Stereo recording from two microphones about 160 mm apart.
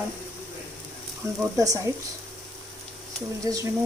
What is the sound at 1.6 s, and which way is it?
Speech, 20° right (ahead or behind).